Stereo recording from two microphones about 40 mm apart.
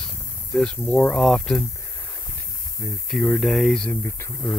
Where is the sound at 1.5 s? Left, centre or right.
Centre.